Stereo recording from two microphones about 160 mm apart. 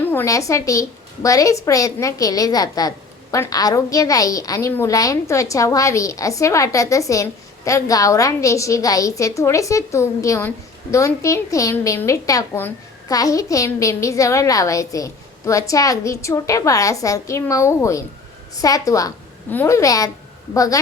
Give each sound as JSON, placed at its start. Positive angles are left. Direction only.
{"t": 0.1, "sound": "a woman's voice", "side_deg": 15}